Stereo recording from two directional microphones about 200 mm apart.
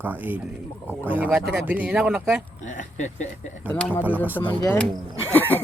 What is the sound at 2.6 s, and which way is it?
Speech, 40° left (ahead or behind).